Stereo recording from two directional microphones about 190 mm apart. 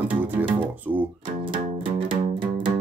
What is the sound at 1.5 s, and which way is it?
Music, 25° right (ahead or behind).